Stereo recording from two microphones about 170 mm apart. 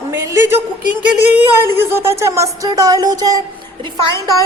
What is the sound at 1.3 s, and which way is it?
A woman's voice, 15° right (ahead or behind).